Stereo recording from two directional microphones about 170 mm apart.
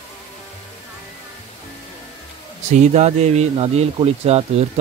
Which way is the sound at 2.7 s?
40° right (ahead or behind).